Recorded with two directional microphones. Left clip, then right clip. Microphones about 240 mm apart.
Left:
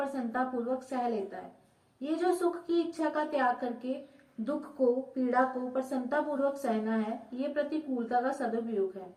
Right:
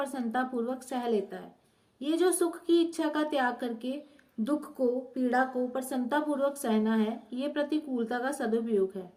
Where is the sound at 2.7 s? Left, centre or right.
Right.